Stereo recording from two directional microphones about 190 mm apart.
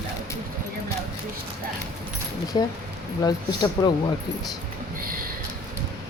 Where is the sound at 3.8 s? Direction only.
15° left (ahead or behind).